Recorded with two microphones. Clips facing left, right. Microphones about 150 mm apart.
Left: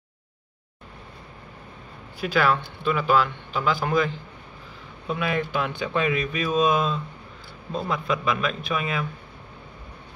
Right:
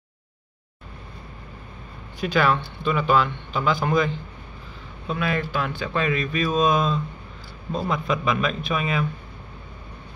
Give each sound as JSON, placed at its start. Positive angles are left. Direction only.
{"t": 2.1, "sound": "speech", "side_deg": 5}